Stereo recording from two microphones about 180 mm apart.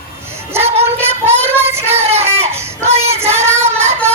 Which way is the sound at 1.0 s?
15° right (ahead or behind).